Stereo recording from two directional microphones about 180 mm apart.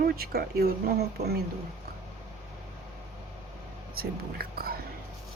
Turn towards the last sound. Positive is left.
turn(degrees=-55)  # may be behind; listen again after turning